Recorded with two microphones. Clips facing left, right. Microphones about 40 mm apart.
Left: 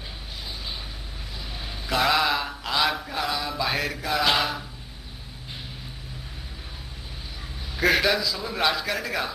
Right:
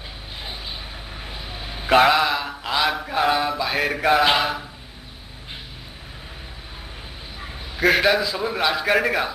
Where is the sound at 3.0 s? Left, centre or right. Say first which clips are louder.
Right 7 dB; right.